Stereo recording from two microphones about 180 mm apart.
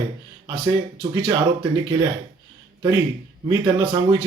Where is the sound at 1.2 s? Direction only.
25° right (ahead or behind).